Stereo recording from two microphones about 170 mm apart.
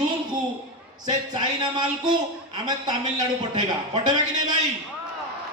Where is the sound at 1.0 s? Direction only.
25° right (ahead or behind).